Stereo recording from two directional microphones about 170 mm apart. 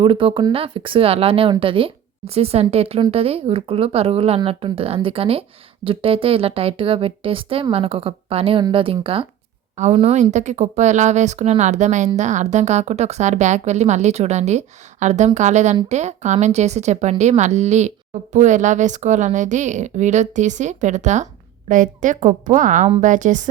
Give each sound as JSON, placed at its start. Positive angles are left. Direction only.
{"t": 0.0, "sound": "a woman's voice", "side_deg": -30}